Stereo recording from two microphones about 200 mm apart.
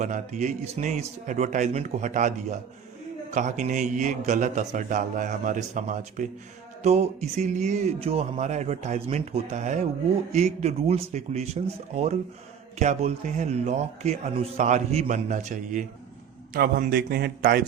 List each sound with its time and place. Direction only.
0.0 s speech: 35° right (ahead or behind)
16.5 s a man's voice: 50° right (ahead or behind)